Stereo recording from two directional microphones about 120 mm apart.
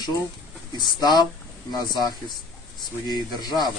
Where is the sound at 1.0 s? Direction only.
35° left (ahead or behind).